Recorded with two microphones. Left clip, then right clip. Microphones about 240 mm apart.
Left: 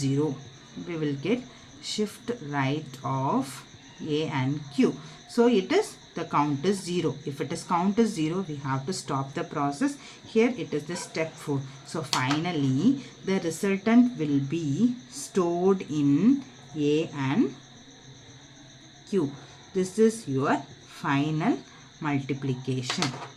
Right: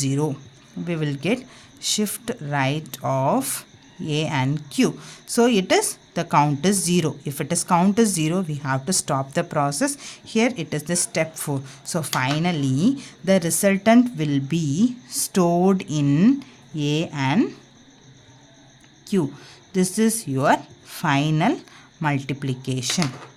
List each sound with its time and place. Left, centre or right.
0.9 s a woman's voice: right
19.7 s a woman's voice: right